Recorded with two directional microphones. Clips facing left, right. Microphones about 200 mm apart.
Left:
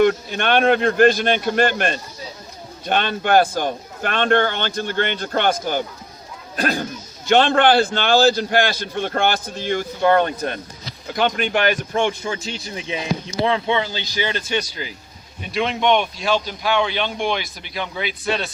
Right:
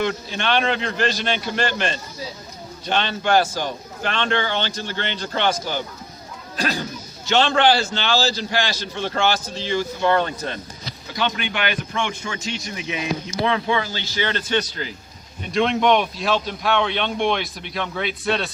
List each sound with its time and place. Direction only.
0.0 s a man's voice: 50° left (ahead or behind); by 14.8 s 10° left (ahead or behind)
15.5 s speech: centre (ahead or behind)